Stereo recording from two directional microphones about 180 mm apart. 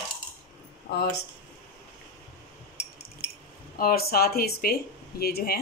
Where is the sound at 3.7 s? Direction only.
55° left (ahead or behind).